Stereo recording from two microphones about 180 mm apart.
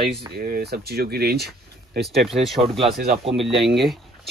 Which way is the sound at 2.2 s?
Centre (ahead or behind).